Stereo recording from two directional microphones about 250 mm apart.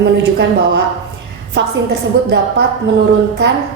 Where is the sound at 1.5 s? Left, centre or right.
Right.